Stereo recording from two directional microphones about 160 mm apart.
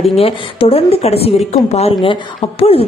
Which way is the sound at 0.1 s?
35° left (ahead or behind).